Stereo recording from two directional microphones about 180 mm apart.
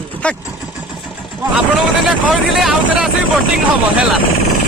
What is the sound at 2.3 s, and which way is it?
Speech, centre (ahead or behind).